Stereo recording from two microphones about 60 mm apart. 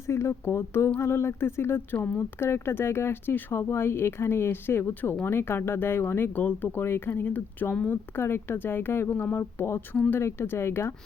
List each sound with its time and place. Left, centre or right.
0.1 s speech: left